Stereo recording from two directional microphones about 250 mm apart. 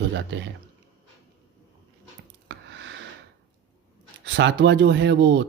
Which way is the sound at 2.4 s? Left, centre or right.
Right.